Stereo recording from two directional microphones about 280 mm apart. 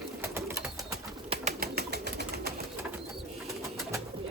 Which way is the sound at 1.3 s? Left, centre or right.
Right.